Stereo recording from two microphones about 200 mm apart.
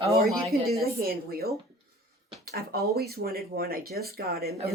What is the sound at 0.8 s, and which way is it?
Speech, 50° right (ahead or behind).